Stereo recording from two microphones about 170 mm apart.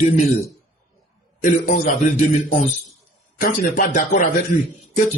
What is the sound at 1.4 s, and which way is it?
Speech, 50° left (ahead or behind).